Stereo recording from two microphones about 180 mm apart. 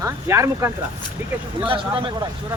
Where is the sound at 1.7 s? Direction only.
25° right (ahead or behind).